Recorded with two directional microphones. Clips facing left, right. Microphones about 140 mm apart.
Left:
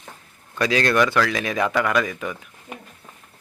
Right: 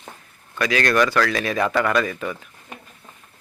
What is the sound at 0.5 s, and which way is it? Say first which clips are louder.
Speech: even; 30° left (ahead or behind).